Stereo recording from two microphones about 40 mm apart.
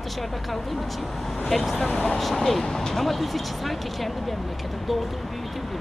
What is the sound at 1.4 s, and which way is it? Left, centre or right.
Speech, centre.